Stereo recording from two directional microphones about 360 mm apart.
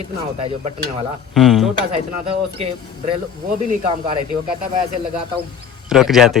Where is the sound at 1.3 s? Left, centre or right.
Centre.